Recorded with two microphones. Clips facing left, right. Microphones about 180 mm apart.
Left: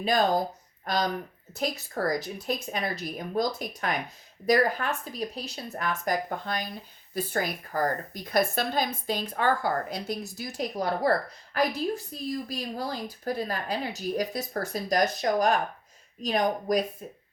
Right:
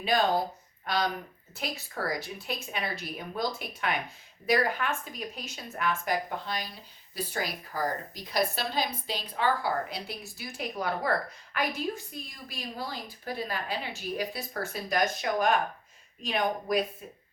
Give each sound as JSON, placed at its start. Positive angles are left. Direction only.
{"t": 0.0, "sound": "speech", "side_deg": 40}